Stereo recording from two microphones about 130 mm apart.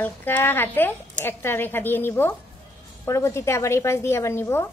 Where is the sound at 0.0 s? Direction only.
15° left (ahead or behind).